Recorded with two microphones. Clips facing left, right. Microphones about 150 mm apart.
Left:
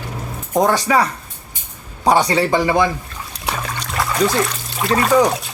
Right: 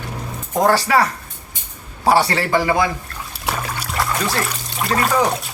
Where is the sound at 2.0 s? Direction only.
20° left (ahead or behind).